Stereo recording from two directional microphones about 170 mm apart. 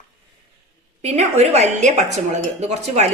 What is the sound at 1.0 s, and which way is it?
Speech, 40° right (ahead or behind).